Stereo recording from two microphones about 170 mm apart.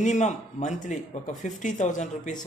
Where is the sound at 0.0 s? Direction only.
45° left (ahead or behind).